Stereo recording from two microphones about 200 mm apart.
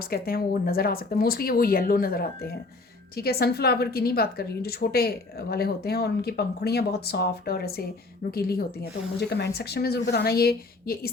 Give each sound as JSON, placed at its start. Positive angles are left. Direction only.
{"t": 0.1, "sound": "a woman's voice", "side_deg": 50}